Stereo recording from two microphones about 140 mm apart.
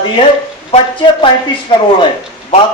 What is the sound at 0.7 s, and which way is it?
Speech, 40° left (ahead or behind).